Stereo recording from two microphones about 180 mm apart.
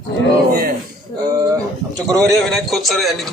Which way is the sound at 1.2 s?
20° right (ahead or behind).